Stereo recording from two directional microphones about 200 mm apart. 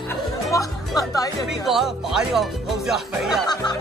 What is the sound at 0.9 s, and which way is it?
Speech, 20° left (ahead or behind).